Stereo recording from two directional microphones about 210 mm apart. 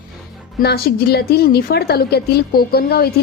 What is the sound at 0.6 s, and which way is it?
A woman's voice, 50° left (ahead or behind).